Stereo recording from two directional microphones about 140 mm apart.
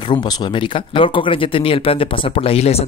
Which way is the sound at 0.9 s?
35° left (ahead or behind).